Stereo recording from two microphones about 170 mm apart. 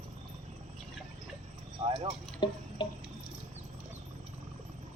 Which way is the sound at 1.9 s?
30° right (ahead or behind).